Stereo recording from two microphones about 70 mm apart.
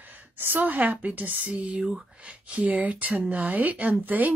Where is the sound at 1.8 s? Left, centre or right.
Centre.